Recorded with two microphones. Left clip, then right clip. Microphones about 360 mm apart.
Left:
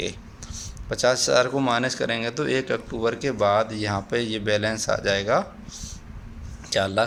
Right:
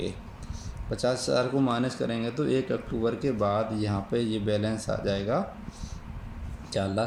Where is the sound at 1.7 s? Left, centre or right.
Left.